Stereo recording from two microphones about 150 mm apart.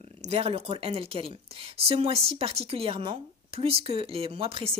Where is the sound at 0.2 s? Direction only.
45° right (ahead or behind).